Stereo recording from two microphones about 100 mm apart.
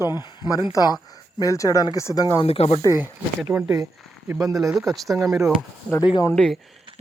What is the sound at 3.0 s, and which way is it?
Speech, 20° right (ahead or behind).